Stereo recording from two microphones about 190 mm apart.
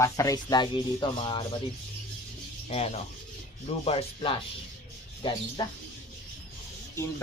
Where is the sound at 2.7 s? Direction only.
35° left (ahead or behind).